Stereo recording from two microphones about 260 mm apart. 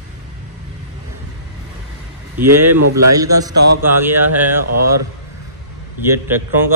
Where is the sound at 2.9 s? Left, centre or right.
Right.